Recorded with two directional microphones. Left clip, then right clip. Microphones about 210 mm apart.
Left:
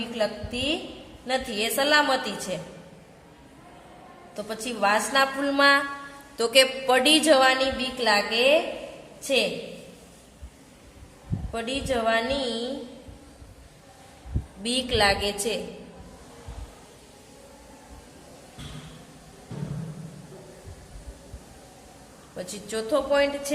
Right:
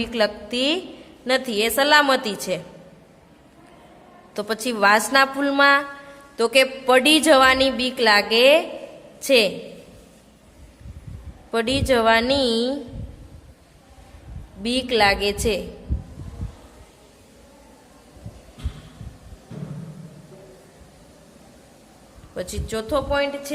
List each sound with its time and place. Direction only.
0.1 s a woman's voice: 50° right (ahead or behind)
4.4 s a woman's voice: 50° right (ahead or behind)
11.5 s a woman's voice: 50° right (ahead or behind)
14.6 s speech: 30° right (ahead or behind)
22.4 s speech: 40° right (ahead or behind); by 23.5 s 25° right (ahead or behind)